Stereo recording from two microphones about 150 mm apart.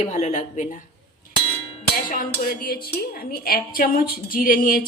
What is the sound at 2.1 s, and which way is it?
A woman's voice, 70° left (ahead or behind).